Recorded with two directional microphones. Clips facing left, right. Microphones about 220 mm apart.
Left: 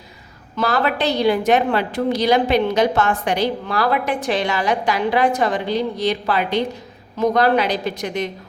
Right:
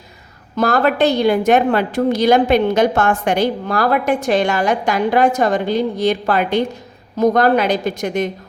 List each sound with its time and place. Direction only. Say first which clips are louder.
0.5 s a woman's voice: right 4 dB; 45° right (ahead or behind)